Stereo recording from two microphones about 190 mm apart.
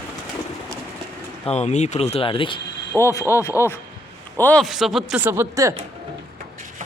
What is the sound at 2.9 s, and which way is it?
Speech, 15° left (ahead or behind).